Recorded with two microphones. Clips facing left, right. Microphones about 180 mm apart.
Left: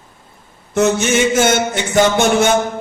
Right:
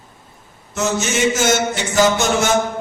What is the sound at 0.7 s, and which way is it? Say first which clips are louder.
A man's voice: left 6 dB; 60° left (ahead or behind).